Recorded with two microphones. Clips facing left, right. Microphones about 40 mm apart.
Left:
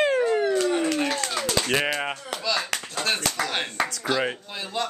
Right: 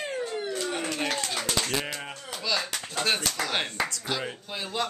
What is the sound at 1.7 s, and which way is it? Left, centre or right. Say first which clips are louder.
Speech: left 7 dB; left.